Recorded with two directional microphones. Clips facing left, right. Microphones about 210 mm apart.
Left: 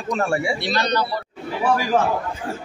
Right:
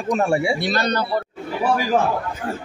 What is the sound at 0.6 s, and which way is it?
Speech, 45° right (ahead or behind).